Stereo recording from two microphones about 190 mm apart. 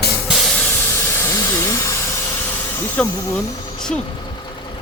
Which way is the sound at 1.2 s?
15° left (ahead or behind).